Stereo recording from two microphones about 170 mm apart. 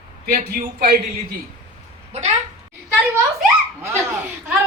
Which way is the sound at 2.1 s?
40° right (ahead or behind).